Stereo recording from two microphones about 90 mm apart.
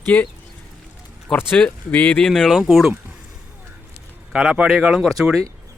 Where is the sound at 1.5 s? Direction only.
15° left (ahead or behind); by 2.9 s centre (ahead or behind).